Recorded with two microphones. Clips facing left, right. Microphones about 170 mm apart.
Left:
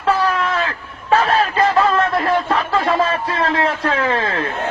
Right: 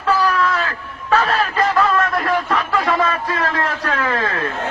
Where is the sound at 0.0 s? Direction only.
30° left (ahead or behind).